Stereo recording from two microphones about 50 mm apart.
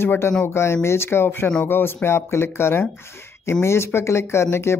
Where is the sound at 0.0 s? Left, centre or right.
Left.